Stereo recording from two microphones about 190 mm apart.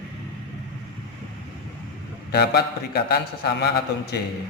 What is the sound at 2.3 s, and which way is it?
Speech, 55° left (ahead or behind).